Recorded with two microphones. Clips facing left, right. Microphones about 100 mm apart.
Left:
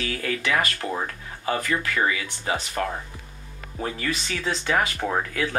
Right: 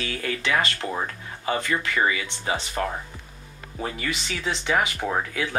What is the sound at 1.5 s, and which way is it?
Speech, 25° right (ahead or behind).